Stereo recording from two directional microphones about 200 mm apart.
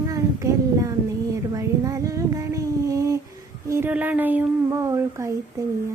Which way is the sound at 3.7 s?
10° right (ahead or behind).